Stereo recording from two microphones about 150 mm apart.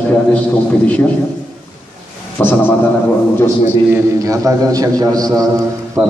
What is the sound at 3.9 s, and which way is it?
A man's voice, 20° right (ahead or behind).